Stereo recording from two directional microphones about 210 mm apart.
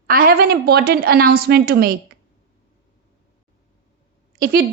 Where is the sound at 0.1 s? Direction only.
45° right (ahead or behind).